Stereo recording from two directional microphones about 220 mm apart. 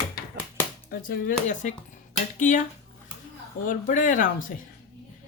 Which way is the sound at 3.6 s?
35° left (ahead or behind).